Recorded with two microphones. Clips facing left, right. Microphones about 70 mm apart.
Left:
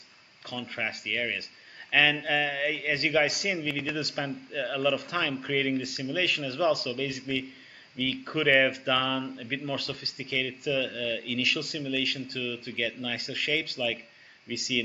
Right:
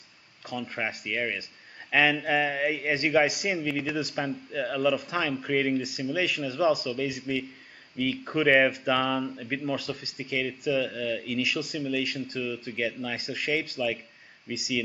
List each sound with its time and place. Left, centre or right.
0.5 s a man's voice: centre